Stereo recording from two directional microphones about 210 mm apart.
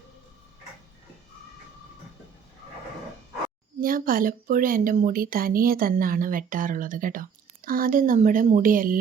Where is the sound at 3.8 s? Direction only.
40° right (ahead or behind).